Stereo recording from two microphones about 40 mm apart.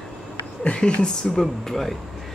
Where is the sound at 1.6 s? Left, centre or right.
Centre.